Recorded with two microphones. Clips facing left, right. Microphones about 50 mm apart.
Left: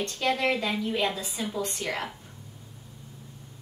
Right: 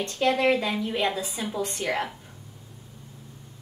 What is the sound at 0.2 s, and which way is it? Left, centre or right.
A woman's voice, centre.